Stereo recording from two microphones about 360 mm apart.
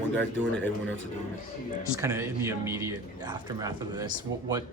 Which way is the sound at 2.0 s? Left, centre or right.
Centre.